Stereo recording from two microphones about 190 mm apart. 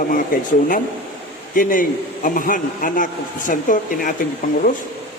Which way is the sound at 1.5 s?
45° left (ahead or behind).